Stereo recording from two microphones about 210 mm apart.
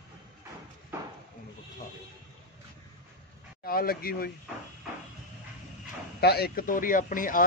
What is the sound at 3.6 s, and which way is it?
Speech, 45° left (ahead or behind).